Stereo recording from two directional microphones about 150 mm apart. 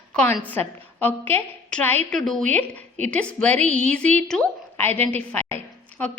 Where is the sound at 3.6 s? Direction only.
50° right (ahead or behind).